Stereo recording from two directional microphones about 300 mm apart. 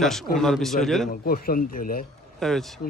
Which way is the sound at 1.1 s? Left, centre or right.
Left.